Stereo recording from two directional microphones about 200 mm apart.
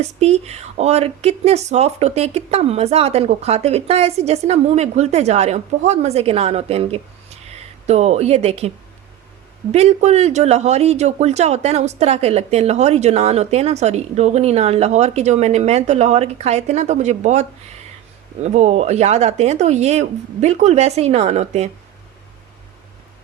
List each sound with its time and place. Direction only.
0.0 s speech: 35° right (ahead or behind)
9.7 s speech: 35° right (ahead or behind)